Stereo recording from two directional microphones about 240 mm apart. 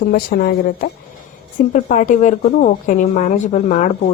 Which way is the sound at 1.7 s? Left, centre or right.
Left.